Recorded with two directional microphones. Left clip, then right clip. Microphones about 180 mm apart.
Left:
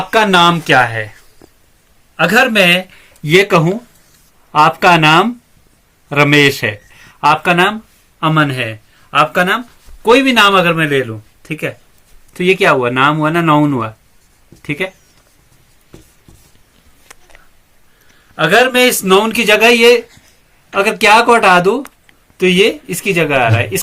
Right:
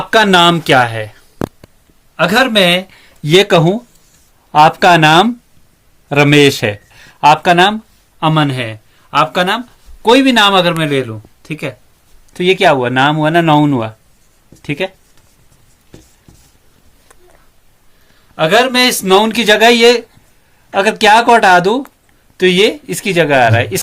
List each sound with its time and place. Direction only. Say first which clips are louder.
0.1 s speech: right 1 dB; 70° right (ahead or behind)
2.1 s speech: even; 70° right (ahead or behind)
6.1 s speech: right 1 dB; 75° right (ahead or behind)
8.2 s speech: even; 90° right; by 9.5 s 70° right (ahead or behind)
10.0 s speech: even; 90° right; by 11.7 s 70° right (ahead or behind)
12.4 s speech: right 1 dB; 85° right
18.3 s speech: even; 90° right
19.5 s speech: even; 75° right (ahead or behind)